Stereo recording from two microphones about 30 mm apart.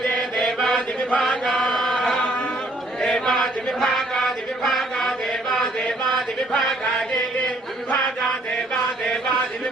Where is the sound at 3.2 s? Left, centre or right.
Centre.